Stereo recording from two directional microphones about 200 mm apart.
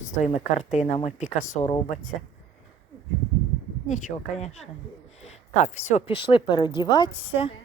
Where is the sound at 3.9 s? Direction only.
40° left (ahead or behind).